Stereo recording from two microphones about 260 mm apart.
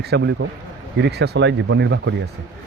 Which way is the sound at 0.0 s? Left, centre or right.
Right.